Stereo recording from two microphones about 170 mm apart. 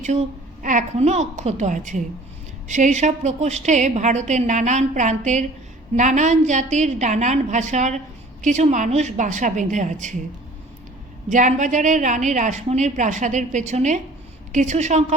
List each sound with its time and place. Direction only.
0.0 s a woman's voice: 45° right (ahead or behind)
11.3 s a woman's voice: 45° right (ahead or behind)